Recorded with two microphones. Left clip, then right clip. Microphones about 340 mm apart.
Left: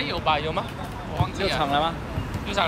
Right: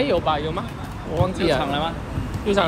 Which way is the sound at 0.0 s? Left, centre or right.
Centre.